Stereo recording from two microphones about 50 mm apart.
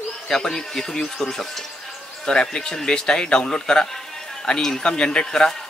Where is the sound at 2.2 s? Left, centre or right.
Centre.